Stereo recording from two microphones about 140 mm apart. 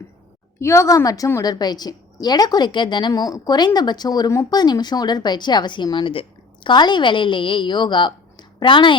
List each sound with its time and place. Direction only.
0.6 s a woman's voice: 20° left (ahead or behind); by 9.0 s 35° left (ahead or behind)